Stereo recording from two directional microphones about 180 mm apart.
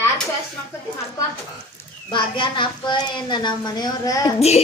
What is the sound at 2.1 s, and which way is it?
A woman's voice, 30° left (ahead or behind).